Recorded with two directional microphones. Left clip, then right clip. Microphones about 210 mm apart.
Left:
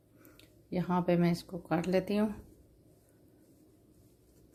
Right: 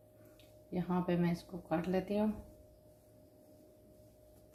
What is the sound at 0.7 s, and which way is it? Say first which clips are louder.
Speech: left 6 dB; 55° left (ahead or behind).